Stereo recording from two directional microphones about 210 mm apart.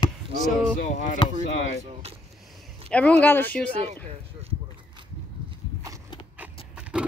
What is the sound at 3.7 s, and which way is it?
Speech, 30° right (ahead or behind).